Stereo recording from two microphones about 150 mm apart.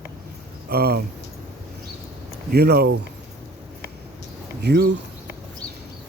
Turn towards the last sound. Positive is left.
turn(degrees=-90)